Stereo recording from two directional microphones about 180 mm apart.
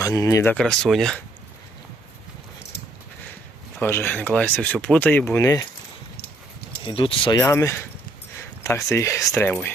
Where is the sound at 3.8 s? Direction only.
10° left (ahead or behind).